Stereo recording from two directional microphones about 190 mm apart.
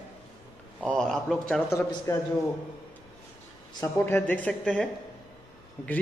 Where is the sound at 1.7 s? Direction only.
15° left (ahead or behind).